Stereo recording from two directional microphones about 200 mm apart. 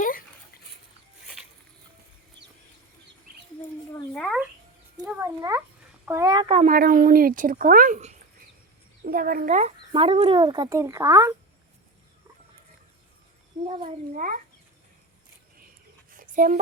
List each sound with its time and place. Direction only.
0.0 s dog: 45° left (ahead or behind)
3.3 s chicken: 45° right (ahead or behind)
3.9 s a sound: 5° left (ahead or behind)
5.0 s cat: 10° right (ahead or behind)
6.1 s speech: 15° right (ahead or behind)
6.5 s speech: 35° right (ahead or behind)
6.7 s a woman's voice: 45° right (ahead or behind); by 11.3 s 15° right (ahead or behind)
13.7 s speech: 25° right (ahead or behind)
14.2 s a woman's voice: 40° right (ahead or behind)
16.0 s a sound: 40° right (ahead or behind)